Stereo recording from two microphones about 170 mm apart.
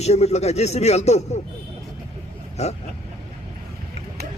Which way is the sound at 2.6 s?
40° left (ahead or behind).